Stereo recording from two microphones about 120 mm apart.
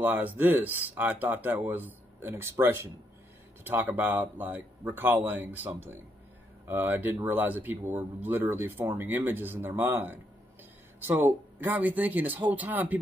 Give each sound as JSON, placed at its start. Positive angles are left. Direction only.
{"t": 0.0, "sound": "speech", "side_deg": -15}
{"t": 6.7, "sound": "speech", "side_deg": -15}